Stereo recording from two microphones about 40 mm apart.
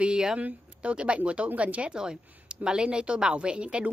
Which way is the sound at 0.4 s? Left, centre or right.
Right.